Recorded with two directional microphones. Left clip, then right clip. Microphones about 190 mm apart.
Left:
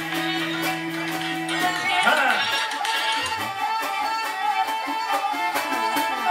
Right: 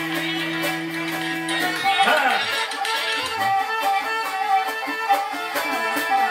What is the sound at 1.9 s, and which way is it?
Music, 25° left (ahead or behind).